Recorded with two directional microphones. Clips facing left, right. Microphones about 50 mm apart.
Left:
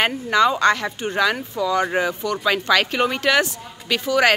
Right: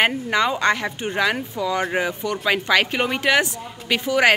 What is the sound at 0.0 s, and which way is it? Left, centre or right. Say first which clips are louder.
Speech: left 2 dB; centre.